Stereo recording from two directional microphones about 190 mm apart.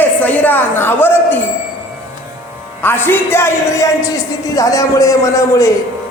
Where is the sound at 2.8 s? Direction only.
10° left (ahead or behind).